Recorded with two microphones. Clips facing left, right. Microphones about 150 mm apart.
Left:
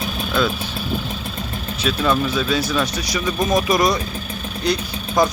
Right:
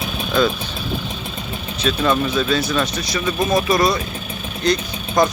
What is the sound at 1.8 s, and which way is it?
Speech, 5° left (ahead or behind).